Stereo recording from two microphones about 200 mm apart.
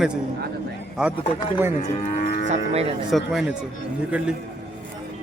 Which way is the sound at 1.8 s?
35° left (ahead or behind).